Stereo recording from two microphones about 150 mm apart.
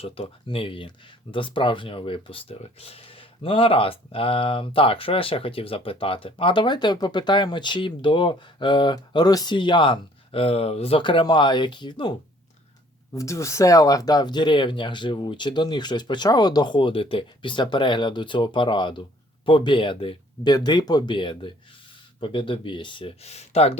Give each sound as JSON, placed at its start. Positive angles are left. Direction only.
{"t": 0.0, "sound": "speech", "side_deg": 40}
{"t": 13.1, "sound": "speech", "side_deg": 20}